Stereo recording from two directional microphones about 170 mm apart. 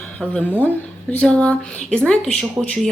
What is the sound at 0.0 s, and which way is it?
Speech, 5° left (ahead or behind).